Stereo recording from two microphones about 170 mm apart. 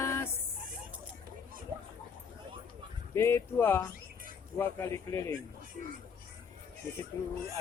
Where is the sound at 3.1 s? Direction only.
15° left (ahead or behind).